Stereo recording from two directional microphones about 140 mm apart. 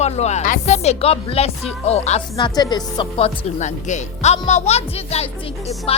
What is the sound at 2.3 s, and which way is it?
Speech, 30° left (ahead or behind).